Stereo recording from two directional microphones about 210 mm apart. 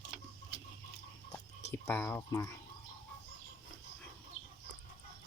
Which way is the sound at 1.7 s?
10° left (ahead or behind).